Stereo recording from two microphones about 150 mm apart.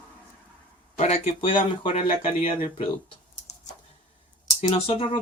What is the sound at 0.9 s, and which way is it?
Speech, 50° left (ahead or behind).